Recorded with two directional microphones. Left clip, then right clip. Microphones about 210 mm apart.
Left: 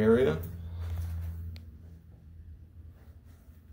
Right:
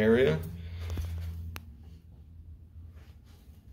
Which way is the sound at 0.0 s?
10° left (ahead or behind).